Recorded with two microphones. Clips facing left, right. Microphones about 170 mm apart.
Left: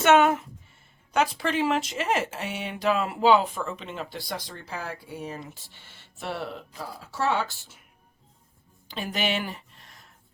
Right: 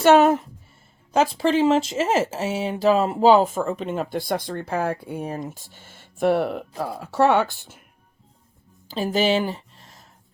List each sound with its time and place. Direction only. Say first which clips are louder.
0.0 s speech: right 4 dB; 35° right (ahead or behind); by 7.8 s 60° right (ahead or behind)
9.0 s a woman's voice: right 8 dB; 35° right (ahead or behind)